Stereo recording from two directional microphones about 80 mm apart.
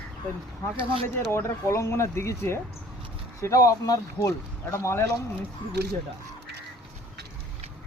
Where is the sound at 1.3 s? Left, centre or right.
Left.